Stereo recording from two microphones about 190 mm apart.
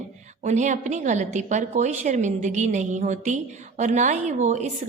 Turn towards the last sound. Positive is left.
turn(degrees=-35)  # may be behind; listen again after turning